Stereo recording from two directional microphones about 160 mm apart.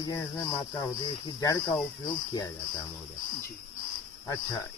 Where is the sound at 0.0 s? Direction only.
25° left (ahead or behind).